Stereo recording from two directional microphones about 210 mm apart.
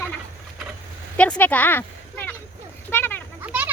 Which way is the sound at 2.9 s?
10° left (ahead or behind).